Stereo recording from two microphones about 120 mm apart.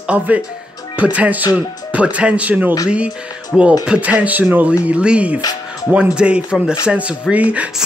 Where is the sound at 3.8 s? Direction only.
10° right (ahead or behind).